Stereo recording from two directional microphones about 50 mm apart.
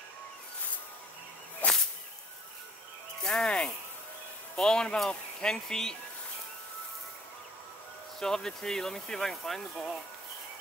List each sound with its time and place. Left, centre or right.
1.6 s whip: left
3.2 s speech: centre
8.2 s speech: centre